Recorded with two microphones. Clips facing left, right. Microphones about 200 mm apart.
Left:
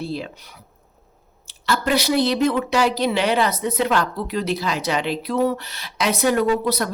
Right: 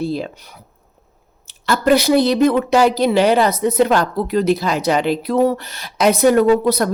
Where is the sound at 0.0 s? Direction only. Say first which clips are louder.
Right 6 dB; 45° right (ahead or behind).